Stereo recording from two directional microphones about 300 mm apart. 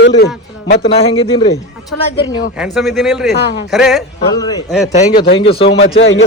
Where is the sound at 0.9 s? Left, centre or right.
Centre.